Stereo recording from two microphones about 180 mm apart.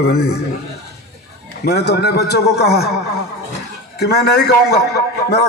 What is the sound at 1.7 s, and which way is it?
A man's voice, 65° left (ahead or behind).